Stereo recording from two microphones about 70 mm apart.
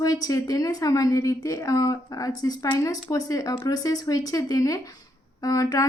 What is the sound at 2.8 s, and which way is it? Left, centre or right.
A woman's voice, left.